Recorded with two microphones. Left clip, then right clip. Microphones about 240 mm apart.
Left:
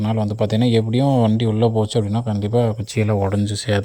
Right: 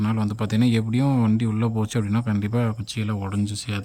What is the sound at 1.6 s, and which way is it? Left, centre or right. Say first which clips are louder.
Speech: left 8 dB; centre.